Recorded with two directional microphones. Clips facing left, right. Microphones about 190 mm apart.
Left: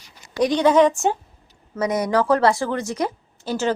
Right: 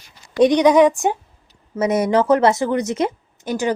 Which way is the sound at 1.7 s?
25° right (ahead or behind).